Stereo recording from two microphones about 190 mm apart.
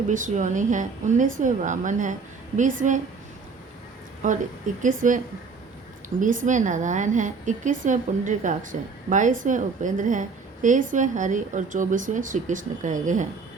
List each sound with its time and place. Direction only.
0.1 s a woman's voice: 40° right (ahead or behind)
4.2 s a woman's voice: 40° right (ahead or behind)